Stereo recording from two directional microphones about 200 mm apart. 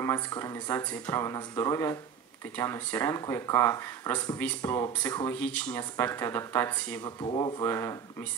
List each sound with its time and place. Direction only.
0.0 s speech: 15° left (ahead or behind)
7.0 s speech: 25° left (ahead or behind)
7.6 s speech: 15° left (ahead or behind)